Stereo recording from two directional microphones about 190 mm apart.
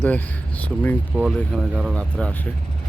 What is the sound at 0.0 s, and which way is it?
Speech, 10° left (ahead or behind).